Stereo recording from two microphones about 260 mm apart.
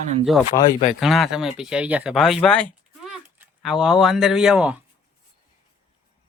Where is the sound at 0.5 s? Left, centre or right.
Centre.